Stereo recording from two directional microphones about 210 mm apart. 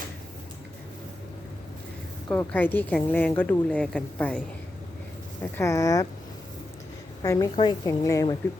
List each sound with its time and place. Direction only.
2.3 s a woman's voice: 10° left (ahead or behind)
7.2 s a woman's voice: 15° left (ahead or behind)